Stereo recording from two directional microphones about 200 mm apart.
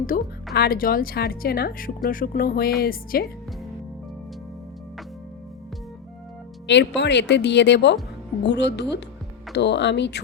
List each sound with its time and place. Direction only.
0.1 s a woman's voice: 45° left (ahead or behind)
6.7 s speech: 60° left (ahead or behind)